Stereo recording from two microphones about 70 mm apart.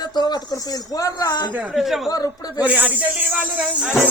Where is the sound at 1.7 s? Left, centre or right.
Centre.